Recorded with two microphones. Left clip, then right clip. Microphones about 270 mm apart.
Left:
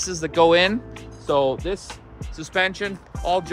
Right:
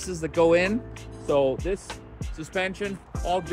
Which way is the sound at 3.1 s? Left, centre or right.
Centre.